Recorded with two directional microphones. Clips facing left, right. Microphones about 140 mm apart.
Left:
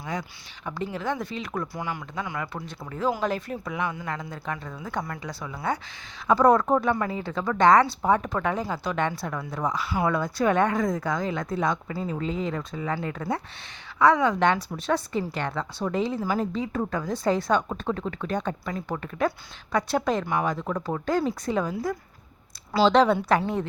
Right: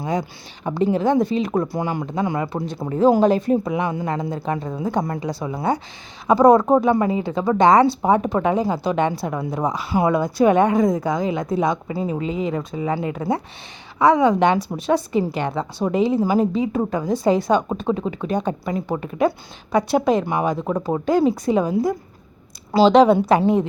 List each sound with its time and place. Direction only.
0.0 s speech: 25° right (ahead or behind)